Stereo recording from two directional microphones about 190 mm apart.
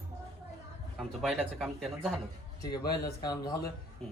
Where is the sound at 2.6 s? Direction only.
20° left (ahead or behind).